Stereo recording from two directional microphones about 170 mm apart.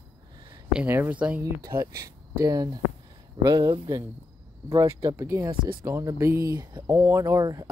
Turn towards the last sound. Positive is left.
turn(degrees=-20)  # may be behind; listen again after turning